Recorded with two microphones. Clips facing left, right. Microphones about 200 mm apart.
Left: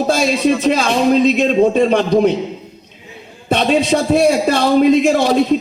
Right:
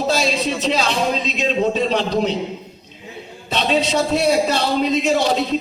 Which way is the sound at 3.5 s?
50° left (ahead or behind).